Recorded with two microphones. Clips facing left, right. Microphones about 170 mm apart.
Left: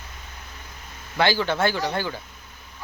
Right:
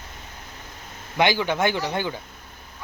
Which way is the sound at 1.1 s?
15° right (ahead or behind).